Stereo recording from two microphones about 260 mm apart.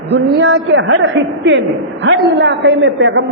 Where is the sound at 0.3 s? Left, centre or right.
Right.